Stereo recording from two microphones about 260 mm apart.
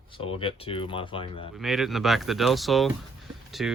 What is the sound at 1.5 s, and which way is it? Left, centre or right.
Speech, centre.